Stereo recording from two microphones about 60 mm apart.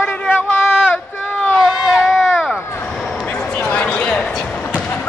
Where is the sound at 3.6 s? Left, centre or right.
Centre.